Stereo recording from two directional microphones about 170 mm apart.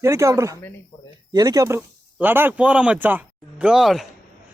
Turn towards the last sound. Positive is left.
turn(degrees=0)  # may be behind; listen again after turning